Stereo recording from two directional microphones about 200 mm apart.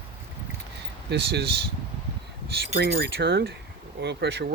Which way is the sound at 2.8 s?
60° right (ahead or behind).